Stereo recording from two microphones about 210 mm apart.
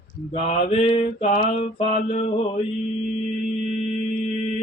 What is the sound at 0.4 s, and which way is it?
Mantra, 30° left (ahead or behind).